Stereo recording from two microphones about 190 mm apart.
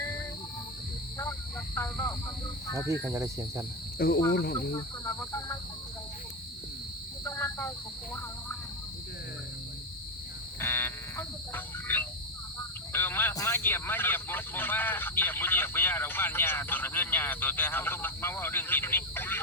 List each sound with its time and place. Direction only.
1.2 s vehicle: 10° left (ahead or behind)
2.9 s cricket: 15° right (ahead or behind)
3.9 s speech: 55° left (ahead or behind)
4.7 s speech: 15° left (ahead or behind)
7.3 s a sound: 10° left (ahead or behind)
10.6 s buzzer: 10° left (ahead or behind)
12.9 s speech: 10° left (ahead or behind)